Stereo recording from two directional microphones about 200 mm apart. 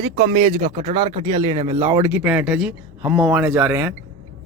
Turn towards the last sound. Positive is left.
turn(degrees=-10)  # may be behind; listen again after turning